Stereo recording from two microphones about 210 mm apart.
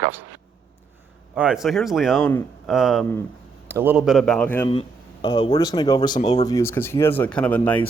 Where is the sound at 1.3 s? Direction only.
5° right (ahead or behind).